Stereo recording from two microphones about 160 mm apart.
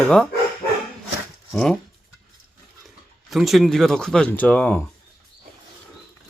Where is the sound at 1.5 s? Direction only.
5° left (ahead or behind).